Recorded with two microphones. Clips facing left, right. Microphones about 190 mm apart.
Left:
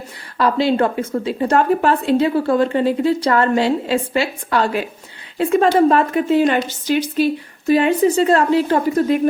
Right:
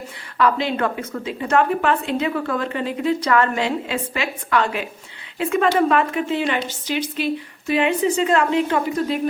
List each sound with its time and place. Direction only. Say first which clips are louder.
0.3 s a woman's voice: left 4 dB; 35° left (ahead or behind)